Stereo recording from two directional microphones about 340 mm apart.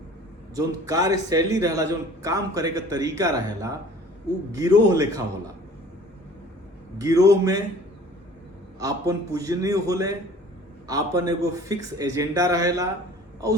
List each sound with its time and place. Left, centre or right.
0.5 s a man's voice: centre
7.0 s a man's voice: centre
8.8 s a man's voice: centre